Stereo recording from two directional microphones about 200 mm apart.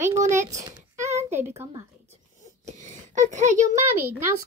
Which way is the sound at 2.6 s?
40° right (ahead or behind).